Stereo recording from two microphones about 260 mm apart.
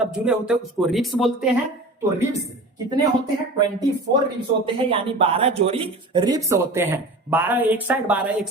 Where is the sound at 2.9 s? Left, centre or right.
Centre.